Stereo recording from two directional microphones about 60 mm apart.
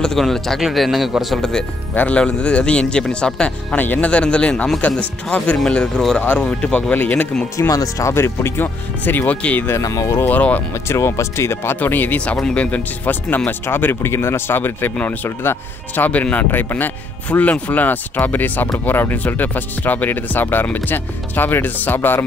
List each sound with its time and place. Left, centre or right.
0.0 s speech: centre
2.0 s speech: left
3.7 s speech: left
4.1 s a man's voice: centre
7.5 s speech: left
8.1 s speech: left
9.8 s speech: left
10.2 s speech: left
10.9 s speech: left
11.8 s speech: left
16.0 s speech: left